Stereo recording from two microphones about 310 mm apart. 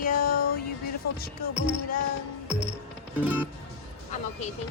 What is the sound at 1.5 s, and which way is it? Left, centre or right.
Music, right.